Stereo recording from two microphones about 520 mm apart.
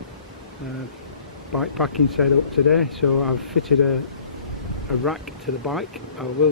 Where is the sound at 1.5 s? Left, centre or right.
Centre.